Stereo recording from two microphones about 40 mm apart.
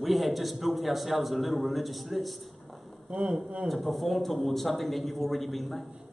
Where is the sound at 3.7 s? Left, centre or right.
Centre.